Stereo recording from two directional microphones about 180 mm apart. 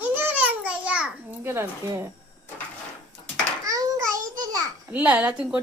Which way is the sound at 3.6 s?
20° right (ahead or behind).